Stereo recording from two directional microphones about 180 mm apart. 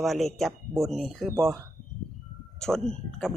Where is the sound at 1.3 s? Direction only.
15° right (ahead or behind).